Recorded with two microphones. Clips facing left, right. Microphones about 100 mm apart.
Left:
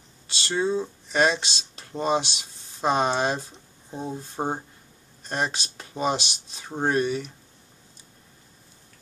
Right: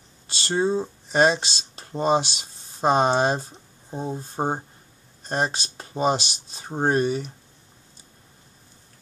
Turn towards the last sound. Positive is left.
turn(degrees=-35)  # may be behind; listen again after turning